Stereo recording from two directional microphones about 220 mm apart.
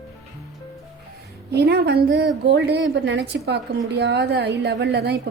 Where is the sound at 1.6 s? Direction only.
45° right (ahead or behind).